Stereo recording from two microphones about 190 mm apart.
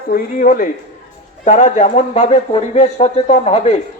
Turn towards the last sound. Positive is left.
turn(degrees=35)  # may be behind; listen again after turning